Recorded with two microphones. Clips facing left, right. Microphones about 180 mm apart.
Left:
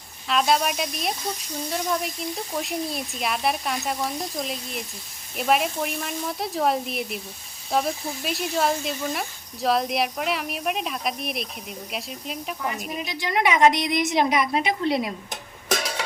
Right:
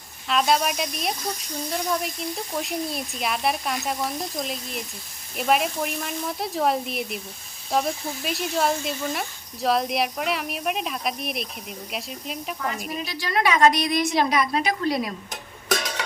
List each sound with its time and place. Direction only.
0.3 s speech: centre (ahead or behind)
13.0 s a woman's voice: 20° left (ahead or behind)